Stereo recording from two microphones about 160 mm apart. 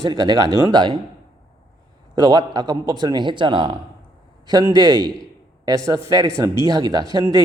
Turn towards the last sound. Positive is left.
turn(degrees=-20)  # may be behind; listen again after turning